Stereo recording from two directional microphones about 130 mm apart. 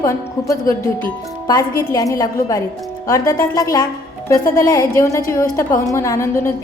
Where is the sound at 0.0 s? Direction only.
25° left (ahead or behind).